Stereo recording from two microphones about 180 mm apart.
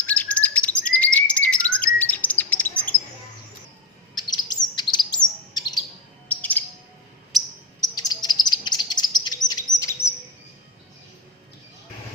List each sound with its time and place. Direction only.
0.0 s bird: 10° left (ahead or behind)
4.1 s chirp: 25° left (ahead or behind)
6.2 s chirp: 10° left (ahead or behind)
7.3 s bird: centre (ahead or behind)
7.8 s insect: 20° left (ahead or behind)